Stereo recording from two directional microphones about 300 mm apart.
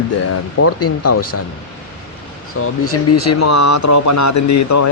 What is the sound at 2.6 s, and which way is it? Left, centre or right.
Speech, left.